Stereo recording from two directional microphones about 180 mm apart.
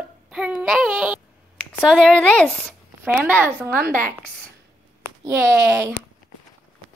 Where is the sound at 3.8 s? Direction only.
50° right (ahead or behind).